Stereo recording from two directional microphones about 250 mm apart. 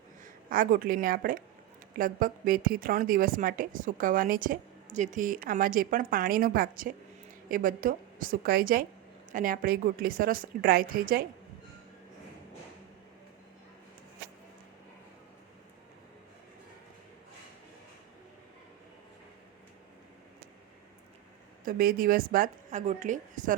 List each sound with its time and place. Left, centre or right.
0.5 s a woman's voice: right
21.6 s a woman's voice: right